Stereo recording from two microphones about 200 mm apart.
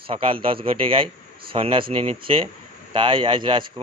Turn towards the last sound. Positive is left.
turn(degrees=-25)  # may be behind; listen again after turning